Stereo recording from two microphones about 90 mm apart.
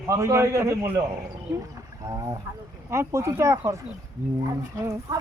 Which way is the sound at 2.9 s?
30° right (ahead or behind).